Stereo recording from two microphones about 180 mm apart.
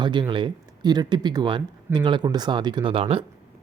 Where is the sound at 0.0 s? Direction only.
25° right (ahead or behind).